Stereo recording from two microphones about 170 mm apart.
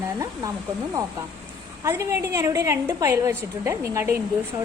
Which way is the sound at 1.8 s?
15° right (ahead or behind).